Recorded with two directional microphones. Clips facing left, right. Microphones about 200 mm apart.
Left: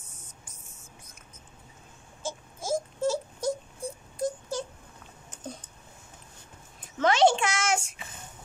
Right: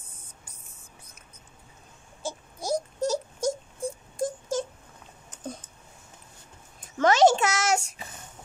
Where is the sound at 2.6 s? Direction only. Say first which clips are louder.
Even; 40° right (ahead or behind).